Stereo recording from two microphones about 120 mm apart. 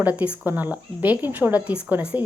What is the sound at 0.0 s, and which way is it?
Speech, 15° right (ahead or behind).